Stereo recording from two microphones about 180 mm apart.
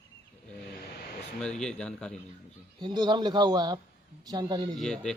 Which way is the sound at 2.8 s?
25° right (ahead or behind).